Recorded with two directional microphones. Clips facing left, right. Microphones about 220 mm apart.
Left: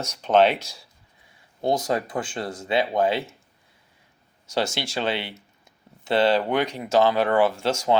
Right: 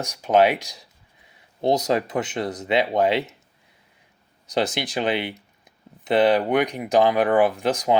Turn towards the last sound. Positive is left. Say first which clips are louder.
# right 1 dB
turn(degrees=-15)  # may be behind; listen again after turning